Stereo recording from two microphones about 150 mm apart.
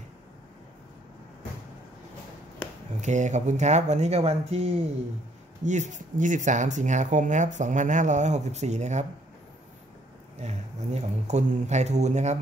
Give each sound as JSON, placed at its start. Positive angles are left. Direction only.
{"t": 3.0, "sound": "speech", "side_deg": -55}
{"t": 10.3, "sound": "speech", "side_deg": -50}